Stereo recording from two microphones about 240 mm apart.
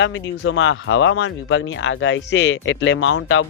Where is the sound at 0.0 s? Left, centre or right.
Left.